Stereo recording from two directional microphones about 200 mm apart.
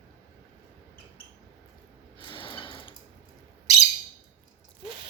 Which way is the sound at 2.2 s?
25° left (ahead or behind).